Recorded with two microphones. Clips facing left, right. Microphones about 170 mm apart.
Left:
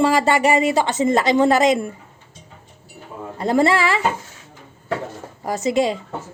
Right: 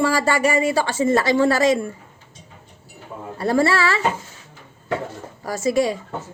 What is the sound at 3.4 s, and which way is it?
Speech, 20° left (ahead or behind).